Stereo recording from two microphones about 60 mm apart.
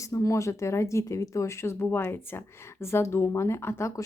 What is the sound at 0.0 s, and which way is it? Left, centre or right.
Speech, left.